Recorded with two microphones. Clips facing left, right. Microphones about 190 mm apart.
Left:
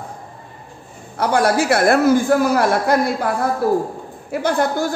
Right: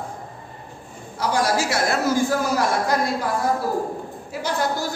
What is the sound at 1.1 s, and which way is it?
A man's voice, 60° left (ahead or behind).